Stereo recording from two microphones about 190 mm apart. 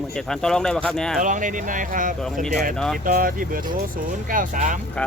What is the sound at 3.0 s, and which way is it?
Speech, 45° right (ahead or behind).